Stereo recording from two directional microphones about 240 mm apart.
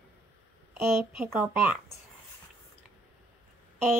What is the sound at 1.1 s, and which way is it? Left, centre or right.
Speech, centre.